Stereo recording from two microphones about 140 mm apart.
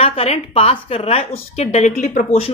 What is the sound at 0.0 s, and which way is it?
A woman's voice, 45° left (ahead or behind).